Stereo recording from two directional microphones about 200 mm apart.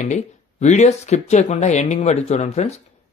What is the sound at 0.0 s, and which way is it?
Speech, 35° left (ahead or behind).